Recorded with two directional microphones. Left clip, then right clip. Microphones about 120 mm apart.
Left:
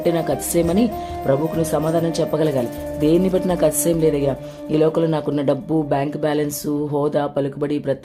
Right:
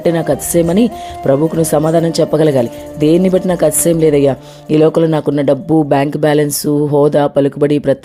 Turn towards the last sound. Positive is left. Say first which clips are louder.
# right 10 dB
turn(degrees=-55)  # may be behind; listen again after turning